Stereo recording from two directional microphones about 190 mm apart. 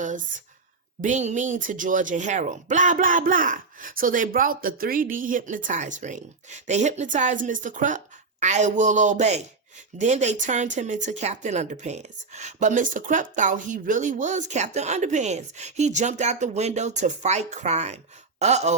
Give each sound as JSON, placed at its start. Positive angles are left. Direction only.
{"t": 1.0, "sound": "speech", "side_deg": -40}